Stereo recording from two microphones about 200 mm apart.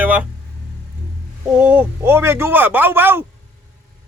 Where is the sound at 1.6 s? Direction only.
10° right (ahead or behind).